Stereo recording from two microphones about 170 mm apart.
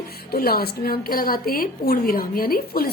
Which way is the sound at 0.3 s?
65° left (ahead or behind).